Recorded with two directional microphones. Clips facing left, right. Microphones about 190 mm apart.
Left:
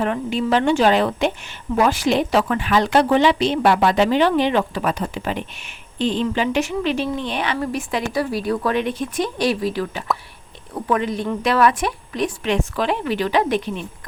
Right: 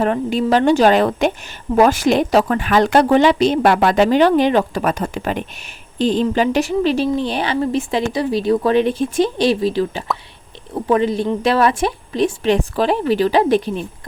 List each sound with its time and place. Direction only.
0.0 s a woman's voice: 40° right (ahead or behind)